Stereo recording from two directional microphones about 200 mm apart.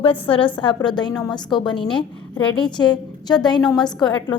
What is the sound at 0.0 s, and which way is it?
Speech, 25° left (ahead or behind).